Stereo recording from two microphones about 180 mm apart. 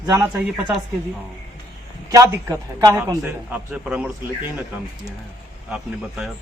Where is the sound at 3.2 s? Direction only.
5° right (ahead or behind).